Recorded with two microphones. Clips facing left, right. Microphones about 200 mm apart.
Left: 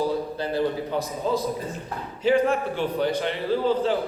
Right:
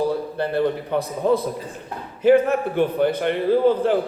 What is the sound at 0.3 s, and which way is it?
A man's voice, 60° right (ahead or behind).